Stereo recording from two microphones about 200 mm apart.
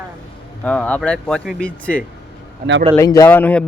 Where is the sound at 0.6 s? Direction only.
5° left (ahead or behind).